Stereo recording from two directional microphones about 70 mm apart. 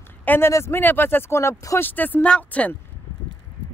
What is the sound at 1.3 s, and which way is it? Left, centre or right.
Speech, left.